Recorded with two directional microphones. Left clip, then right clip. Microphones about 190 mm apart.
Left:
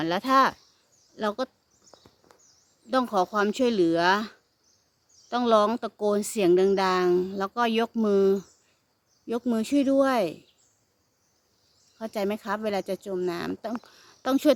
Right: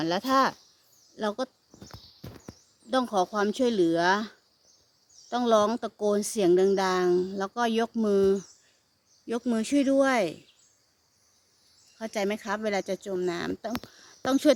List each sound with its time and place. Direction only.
0.0 s speech: centre (ahead or behind)
2.9 s speech: centre (ahead or behind)
11.9 s speech: centre (ahead or behind)